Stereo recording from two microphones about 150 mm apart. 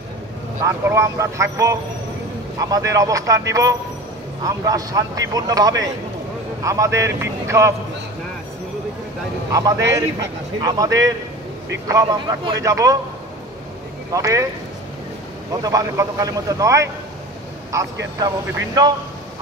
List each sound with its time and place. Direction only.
0.6 s a man's voice: 15° right (ahead or behind)
9.5 s a man's voice: 25° right (ahead or behind)
14.1 s a man's voice: 20° right (ahead or behind)
15.6 s a man's voice: 25° right (ahead or behind)